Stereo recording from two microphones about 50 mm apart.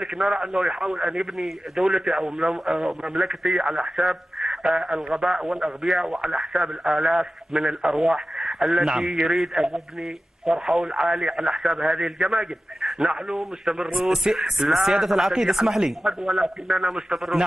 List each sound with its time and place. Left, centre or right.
0.0 s speech: centre